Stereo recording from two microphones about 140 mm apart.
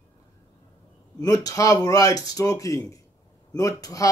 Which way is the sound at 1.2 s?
25° left (ahead or behind).